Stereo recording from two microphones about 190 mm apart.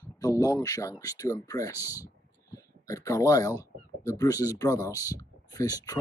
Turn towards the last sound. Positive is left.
turn(degrees=20)  # may be behind; listen again after turning